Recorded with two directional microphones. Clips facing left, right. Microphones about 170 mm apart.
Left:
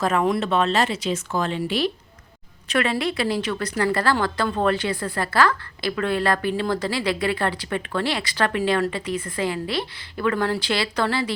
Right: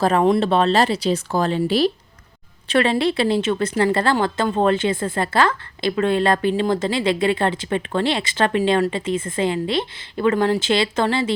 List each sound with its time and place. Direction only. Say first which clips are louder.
0.0 s a woman's voice: right 5 dB; 30° right (ahead or behind)